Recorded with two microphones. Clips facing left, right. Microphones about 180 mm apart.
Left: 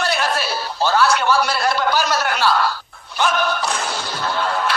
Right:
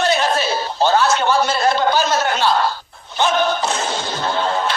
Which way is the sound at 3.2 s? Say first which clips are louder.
Right 3 dB; 25° right (ahead or behind).